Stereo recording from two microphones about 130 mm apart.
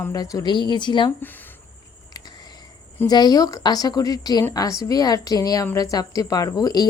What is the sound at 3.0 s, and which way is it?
A woman's voice, 30° left (ahead or behind).